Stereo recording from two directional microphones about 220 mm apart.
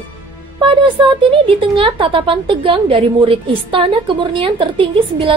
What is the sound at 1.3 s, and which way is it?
A woman's voice, 25° right (ahead or behind).